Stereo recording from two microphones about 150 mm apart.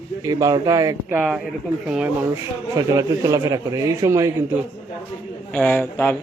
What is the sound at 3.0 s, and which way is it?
A man's voice, 20° right (ahead or behind).